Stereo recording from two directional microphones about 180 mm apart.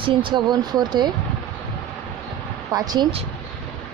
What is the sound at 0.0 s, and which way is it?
Speech, 25° right (ahead or behind).